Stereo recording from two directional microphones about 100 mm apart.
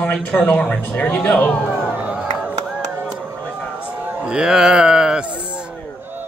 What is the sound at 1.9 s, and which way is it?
Crowd, 15° right (ahead or behind).